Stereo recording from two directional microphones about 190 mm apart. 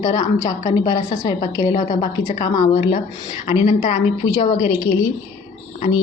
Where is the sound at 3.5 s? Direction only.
35° left (ahead or behind).